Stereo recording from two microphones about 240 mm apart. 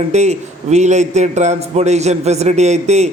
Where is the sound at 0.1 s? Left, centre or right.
Right.